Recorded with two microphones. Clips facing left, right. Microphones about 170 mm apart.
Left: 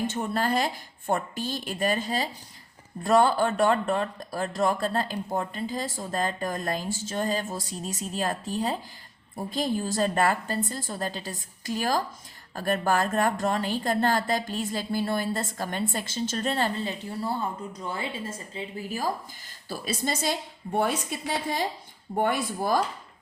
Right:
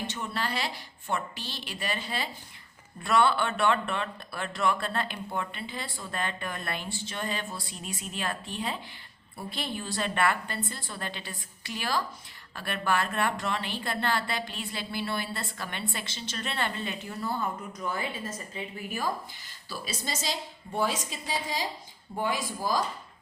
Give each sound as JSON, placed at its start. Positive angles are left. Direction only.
{"t": 0.1, "sound": "a woman's voice", "side_deg": 45}
{"t": 19.6, "sound": "a woman's voice", "side_deg": 50}